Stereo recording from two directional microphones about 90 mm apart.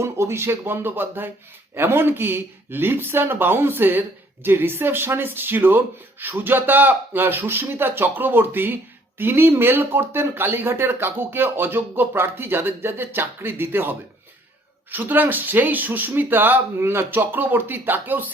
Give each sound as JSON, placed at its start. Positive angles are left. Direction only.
{"t": 0.0, "sound": "speech", "side_deg": -30}